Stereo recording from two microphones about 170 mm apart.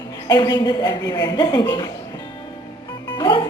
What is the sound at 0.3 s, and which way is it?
A woman's voice, 25° left (ahead or behind).